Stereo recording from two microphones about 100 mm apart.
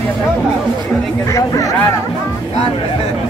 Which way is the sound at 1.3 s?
35° left (ahead or behind).